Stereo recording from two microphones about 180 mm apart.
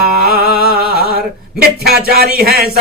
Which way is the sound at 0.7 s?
60° right (ahead or behind).